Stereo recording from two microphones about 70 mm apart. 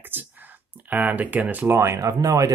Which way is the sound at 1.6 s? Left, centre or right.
Right.